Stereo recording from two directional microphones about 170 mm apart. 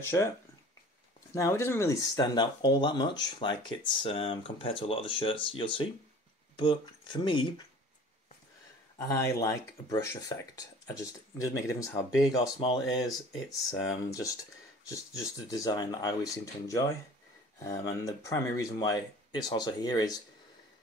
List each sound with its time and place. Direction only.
0.0 s speech: 15° left (ahead or behind)
1.3 s speech: 15° left (ahead or behind)
8.9 s speech: 15° left (ahead or behind)